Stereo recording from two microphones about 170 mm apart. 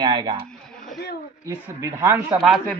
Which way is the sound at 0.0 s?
25° right (ahead or behind).